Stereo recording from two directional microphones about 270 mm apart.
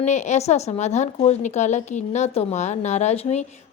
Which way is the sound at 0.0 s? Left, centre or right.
Left.